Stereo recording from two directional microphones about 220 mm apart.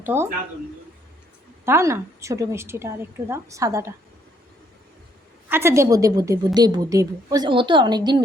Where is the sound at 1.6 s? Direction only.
10° right (ahead or behind).